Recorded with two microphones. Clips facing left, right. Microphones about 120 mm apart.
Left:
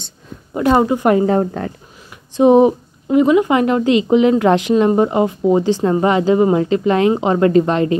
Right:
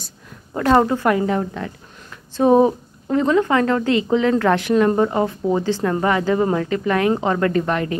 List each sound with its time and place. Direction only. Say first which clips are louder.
0.6 s speech: left 2 dB; 15° left (ahead or behind)
1.1 s a woman's voice: left 6 dB; 35° left (ahead or behind)
2.0 s speech: left 4 dB; 15° left (ahead or behind)